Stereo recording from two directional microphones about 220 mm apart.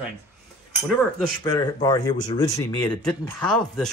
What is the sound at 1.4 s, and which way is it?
Speech, 15° left (ahead or behind).